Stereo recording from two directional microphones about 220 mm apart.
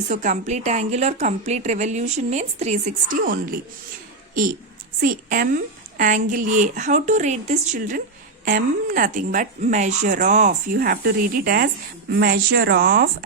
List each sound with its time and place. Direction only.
0.1 s a woman's voice: 35° right (ahead or behind)
4.9 s a woman's voice: 40° right (ahead or behind)